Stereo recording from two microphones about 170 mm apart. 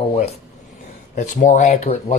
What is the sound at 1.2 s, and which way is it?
Speech, 45° left (ahead or behind).